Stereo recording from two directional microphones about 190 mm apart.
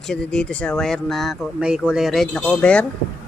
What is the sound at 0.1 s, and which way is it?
Speech, 5° left (ahead or behind).